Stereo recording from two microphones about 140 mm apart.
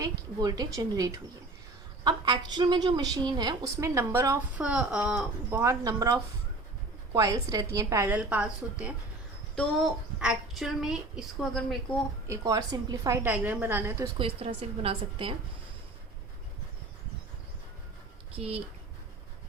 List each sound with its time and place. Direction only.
0.0 s a woman's voice: 30° right (ahead or behind)
4.6 s a woman's voice: 5° right (ahead or behind)
5.5 s a woman's voice: 20° right (ahead or behind); by 11.8 s centre (ahead or behind)
12.3 s a woman's voice: 25° right (ahead or behind)
13.2 s a woman's voice: 15° right (ahead or behind)
14.2 s a woman's voice: 40° right (ahead or behind)
18.3 s speech: 45° right (ahead or behind)